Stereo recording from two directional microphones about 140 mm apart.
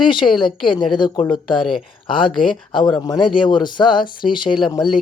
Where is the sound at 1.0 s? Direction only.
30° left (ahead or behind).